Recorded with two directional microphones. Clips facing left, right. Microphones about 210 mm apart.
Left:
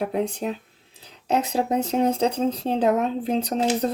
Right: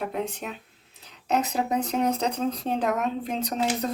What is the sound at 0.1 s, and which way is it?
Speech, 35° left (ahead or behind).